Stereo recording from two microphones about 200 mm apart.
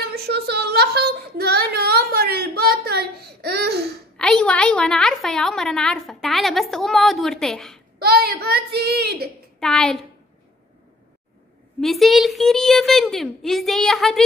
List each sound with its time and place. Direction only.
0.1 s a sound: 55° right (ahead or behind)
4.2 s a woman's voice: 5° left (ahead or behind)
8.0 s a child's voice: 50° right (ahead or behind)
9.6 s a woman's voice: centre (ahead or behind)
11.8 s a woman's voice: centre (ahead or behind)